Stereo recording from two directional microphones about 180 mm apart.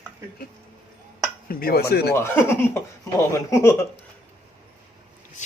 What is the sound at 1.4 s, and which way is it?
Speech, 55° left (ahead or behind).